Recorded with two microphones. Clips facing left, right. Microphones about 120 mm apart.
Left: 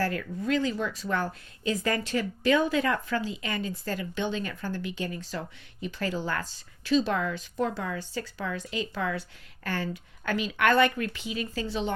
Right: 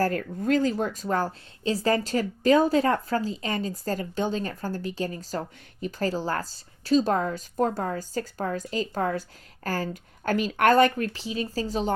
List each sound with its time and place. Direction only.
0.0 s a woman's voice: 45° right (ahead or behind)